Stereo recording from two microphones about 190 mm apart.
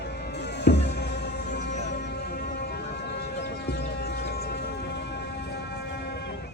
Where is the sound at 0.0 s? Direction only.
60° left (ahead or behind).